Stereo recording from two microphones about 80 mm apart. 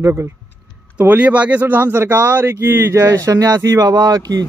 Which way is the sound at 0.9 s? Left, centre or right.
Centre.